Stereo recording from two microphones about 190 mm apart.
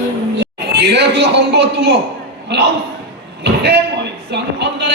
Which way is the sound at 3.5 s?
60° right (ahead or behind).